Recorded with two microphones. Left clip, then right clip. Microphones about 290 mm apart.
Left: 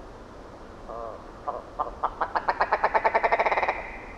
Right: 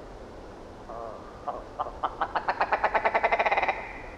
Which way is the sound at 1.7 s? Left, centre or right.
Left.